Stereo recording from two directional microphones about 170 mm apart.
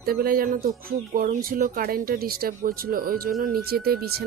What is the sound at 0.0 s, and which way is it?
Speech, 60° right (ahead or behind).